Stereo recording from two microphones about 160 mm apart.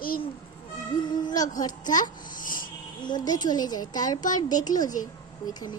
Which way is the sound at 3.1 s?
25° left (ahead or behind).